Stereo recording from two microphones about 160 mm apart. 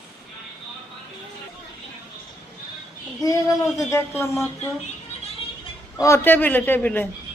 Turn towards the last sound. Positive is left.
turn(degrees=10)  # may be behind; listen again after turning